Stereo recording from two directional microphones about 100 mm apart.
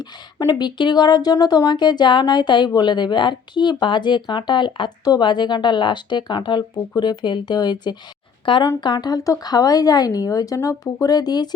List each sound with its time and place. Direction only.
0.0 s speech: 45° left (ahead or behind)
8.8 s speech: 45° left (ahead or behind)